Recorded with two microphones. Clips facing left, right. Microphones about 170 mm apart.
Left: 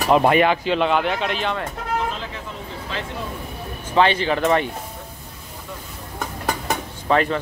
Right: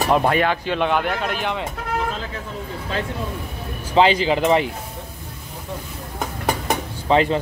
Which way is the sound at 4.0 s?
25° right (ahead or behind).